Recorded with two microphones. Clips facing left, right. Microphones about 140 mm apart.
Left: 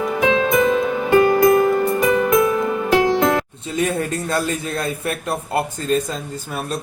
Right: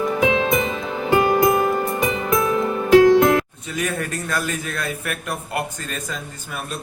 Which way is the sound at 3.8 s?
25° left (ahead or behind).